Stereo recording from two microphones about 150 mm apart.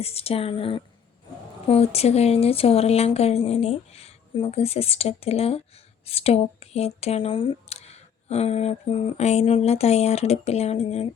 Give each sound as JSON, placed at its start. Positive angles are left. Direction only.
{"t": 0.0, "sound": "speech", "side_deg": 40}